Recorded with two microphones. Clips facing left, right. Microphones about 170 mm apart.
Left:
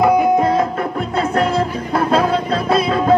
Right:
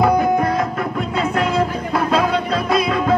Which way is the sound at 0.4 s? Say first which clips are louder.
Left 3 dB; 25° left (ahead or behind).